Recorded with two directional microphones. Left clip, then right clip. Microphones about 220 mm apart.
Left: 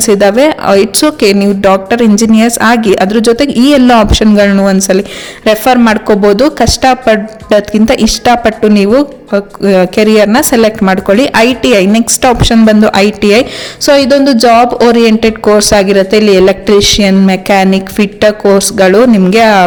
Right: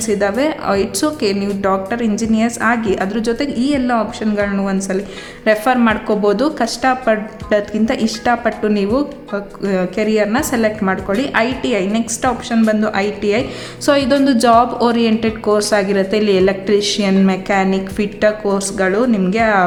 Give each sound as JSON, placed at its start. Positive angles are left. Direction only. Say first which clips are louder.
{"t": 0.0, "sound": "a woman's voice", "louder": "left 10 dB", "side_deg": 35}
{"t": 13.8, "sound": "a woman's voice", "louder": "left 8 dB", "side_deg": 25}